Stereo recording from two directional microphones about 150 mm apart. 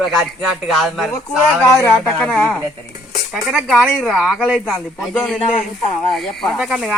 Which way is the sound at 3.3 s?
Centre (ahead or behind).